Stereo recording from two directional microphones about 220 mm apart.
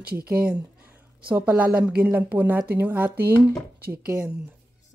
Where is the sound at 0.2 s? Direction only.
5° right (ahead or behind).